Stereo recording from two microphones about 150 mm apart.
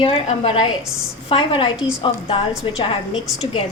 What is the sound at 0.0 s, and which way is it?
Speech, 40° left (ahead or behind).